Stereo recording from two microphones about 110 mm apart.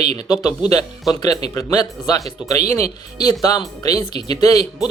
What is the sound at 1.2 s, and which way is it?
Speech, 35° left (ahead or behind).